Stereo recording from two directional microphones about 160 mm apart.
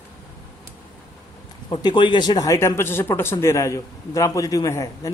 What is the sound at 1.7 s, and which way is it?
Speech, 25° left (ahead or behind).